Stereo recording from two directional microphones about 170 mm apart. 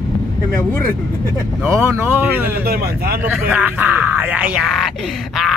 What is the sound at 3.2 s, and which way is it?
Speech, 10° right (ahead or behind).